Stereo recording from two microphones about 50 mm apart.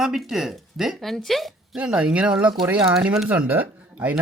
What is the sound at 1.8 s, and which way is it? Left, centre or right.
Speech, centre.